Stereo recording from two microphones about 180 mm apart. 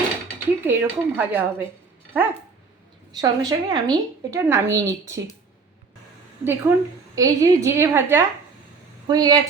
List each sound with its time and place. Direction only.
0.6 s a woman's voice: 10° right (ahead or behind)
3.2 s a woman's voice: 20° right (ahead or behind)
6.4 s a woman's voice: 10° right (ahead or behind)